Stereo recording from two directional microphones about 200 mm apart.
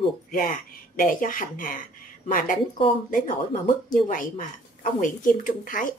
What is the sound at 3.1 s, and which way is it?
A woman's voice, 40° left (ahead or behind).